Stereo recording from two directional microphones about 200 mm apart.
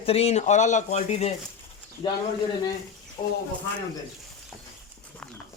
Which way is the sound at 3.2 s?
25° left (ahead or behind).